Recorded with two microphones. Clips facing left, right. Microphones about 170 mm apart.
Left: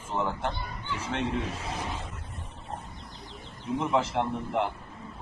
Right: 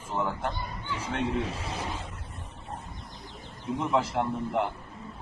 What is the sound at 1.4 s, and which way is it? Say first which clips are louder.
Speech: right 2 dB; 30° right (ahead or behind).